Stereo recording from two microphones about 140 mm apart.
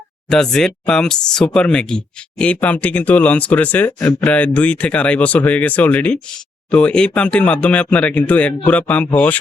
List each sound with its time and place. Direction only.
0.3 s speech: 5° left (ahead or behind)